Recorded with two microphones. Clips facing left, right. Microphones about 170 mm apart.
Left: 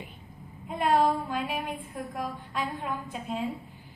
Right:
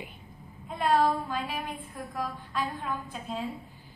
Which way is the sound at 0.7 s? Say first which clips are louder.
Left 1 dB; 15° left (ahead or behind).